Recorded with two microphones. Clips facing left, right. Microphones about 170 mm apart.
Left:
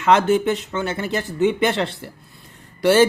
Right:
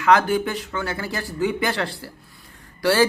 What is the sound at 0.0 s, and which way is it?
Speech, 25° left (ahead or behind).